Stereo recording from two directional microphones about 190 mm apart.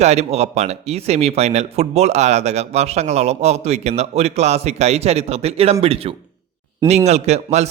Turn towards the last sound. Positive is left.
turn(degrees=-35)  # may be behind; listen again after turning